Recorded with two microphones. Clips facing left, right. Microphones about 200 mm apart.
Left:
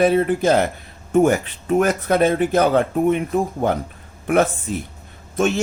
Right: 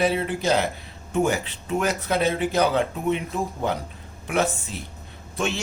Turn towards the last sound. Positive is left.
turn(degrees=50)  # may be behind; listen again after turning